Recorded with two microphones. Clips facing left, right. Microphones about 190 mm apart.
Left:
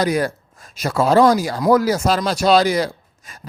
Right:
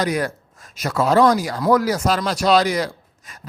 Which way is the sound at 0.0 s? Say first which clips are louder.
Left 3 dB; 30° left (ahead or behind).